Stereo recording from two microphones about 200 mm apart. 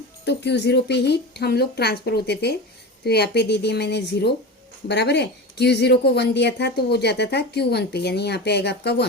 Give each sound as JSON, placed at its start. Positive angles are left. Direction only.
{"t": 0.3, "sound": "speech", "side_deg": 60}